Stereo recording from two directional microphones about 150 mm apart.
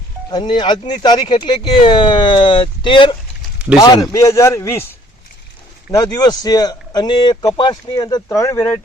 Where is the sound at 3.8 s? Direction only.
20° left (ahead or behind).